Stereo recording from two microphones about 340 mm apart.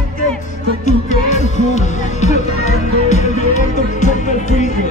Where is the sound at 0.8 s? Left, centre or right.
Left.